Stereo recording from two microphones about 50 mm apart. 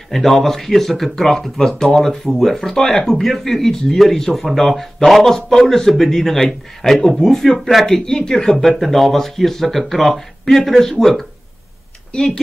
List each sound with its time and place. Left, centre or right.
0.1 s speech: centre
12.1 s speech: centre